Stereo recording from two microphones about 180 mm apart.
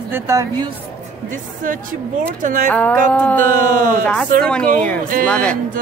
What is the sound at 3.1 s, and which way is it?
Music, 5° left (ahead or behind).